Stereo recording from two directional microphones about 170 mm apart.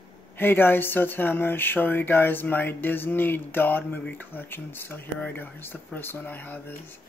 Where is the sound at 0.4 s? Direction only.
10° left (ahead or behind).